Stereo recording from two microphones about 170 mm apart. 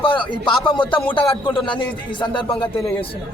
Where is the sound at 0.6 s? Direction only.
25° left (ahead or behind).